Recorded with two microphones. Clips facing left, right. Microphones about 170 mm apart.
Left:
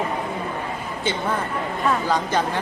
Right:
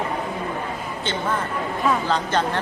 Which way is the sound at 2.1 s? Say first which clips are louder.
Even; 10° left (ahead or behind).